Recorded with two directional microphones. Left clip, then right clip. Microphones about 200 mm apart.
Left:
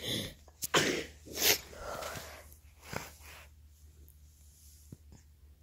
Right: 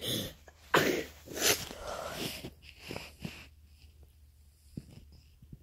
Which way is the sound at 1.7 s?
5° right (ahead or behind).